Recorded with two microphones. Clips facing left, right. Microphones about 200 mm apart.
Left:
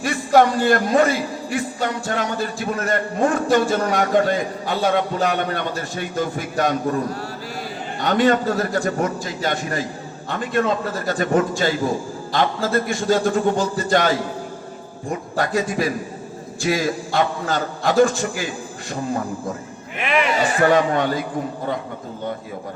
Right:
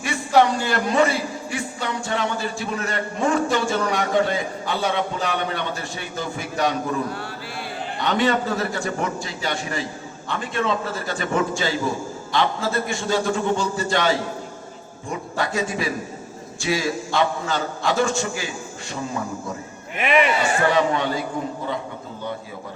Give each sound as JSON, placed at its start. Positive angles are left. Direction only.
{"t": 0.3, "sound": "a sound", "side_deg": 45}
{"t": 0.6, "sound": "speech", "side_deg": 55}
{"t": 6.9, "sound": "a man's voice", "side_deg": 40}
{"t": 12.6, "sound": "a man's voice", "side_deg": 55}
{"t": 20.0, "sound": "a man's voice", "side_deg": 0}
{"t": 20.4, "sound": "speech", "side_deg": 40}